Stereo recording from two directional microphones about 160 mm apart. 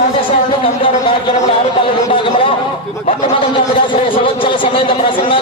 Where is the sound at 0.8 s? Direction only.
30° left (ahead or behind).